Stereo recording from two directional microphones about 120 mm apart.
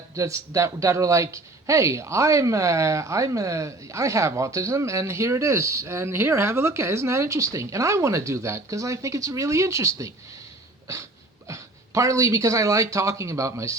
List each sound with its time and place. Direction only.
0.2 s speech: 25° right (ahead or behind)
11.4 s speech: 25° right (ahead or behind)